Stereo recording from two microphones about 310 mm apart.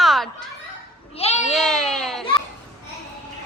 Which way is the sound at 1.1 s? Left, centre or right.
Left.